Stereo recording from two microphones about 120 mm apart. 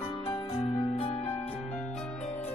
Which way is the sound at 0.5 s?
60° left (ahead or behind).